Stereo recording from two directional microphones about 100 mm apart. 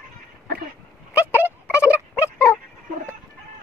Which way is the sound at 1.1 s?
20° right (ahead or behind).